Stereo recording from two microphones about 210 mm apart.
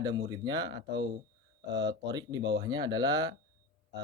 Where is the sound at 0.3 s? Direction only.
20° right (ahead or behind).